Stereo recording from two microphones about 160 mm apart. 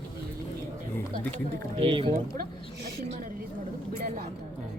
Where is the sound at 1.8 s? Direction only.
30° right (ahead or behind).